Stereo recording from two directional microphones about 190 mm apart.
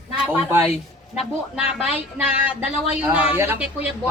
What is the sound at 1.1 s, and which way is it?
A woman's voice, centre (ahead or behind).